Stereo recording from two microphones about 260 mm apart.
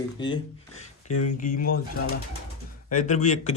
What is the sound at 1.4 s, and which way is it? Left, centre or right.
Speech, left.